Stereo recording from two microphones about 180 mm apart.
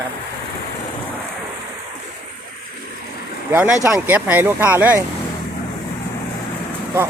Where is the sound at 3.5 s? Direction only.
10° right (ahead or behind).